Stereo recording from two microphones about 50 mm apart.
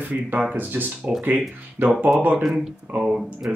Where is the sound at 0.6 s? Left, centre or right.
Right.